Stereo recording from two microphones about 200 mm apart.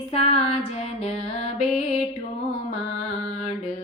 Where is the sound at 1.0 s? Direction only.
30° left (ahead or behind).